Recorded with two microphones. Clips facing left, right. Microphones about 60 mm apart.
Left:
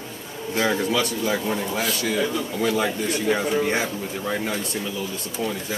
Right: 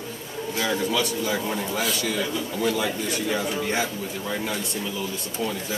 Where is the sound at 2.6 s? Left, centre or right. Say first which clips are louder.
Left 2 dB; left.